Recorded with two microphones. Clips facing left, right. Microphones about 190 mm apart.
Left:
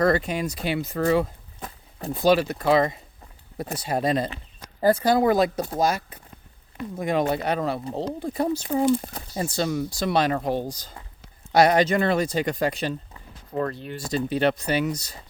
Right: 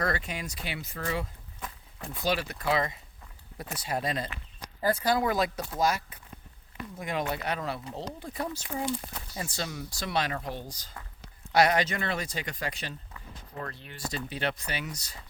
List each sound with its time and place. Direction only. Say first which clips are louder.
0.0 s speech: left 10 dB; 35° left (ahead or behind)